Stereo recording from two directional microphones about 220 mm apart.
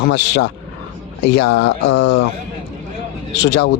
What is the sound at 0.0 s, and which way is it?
Speech, 50° left (ahead or behind).